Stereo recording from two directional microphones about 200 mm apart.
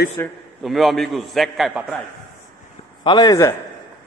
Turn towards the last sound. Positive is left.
turn(degrees=20)  # may be behind; listen again after turning